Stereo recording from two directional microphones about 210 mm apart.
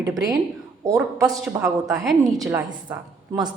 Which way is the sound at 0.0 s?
15° right (ahead or behind).